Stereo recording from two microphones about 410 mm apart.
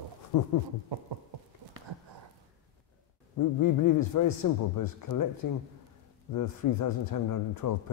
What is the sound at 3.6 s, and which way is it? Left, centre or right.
Speech, left.